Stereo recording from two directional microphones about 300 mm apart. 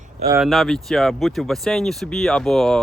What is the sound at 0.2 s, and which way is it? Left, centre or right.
Speech, centre.